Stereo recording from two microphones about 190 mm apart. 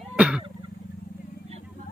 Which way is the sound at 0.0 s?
5° right (ahead or behind).